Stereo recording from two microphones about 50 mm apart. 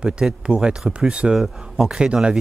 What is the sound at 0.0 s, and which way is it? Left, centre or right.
Speech, centre.